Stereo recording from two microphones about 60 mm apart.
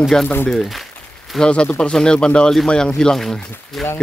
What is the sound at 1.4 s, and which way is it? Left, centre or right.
Speech, centre.